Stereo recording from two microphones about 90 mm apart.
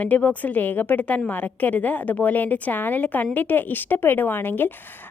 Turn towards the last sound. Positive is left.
turn(degrees=20)  # may be behind; listen again after turning